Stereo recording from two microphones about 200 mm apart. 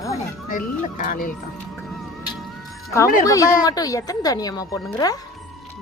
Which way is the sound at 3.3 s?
15° left (ahead or behind).